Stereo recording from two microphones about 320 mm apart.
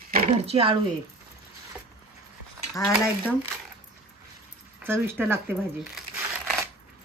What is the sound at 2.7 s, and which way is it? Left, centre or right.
Speech, centre.